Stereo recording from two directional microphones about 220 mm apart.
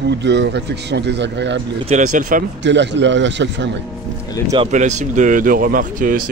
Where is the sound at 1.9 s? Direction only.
35° right (ahead or behind).